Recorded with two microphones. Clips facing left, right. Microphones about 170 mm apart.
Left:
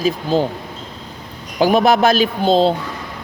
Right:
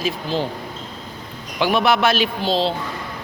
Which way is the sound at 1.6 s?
40° left (ahead or behind).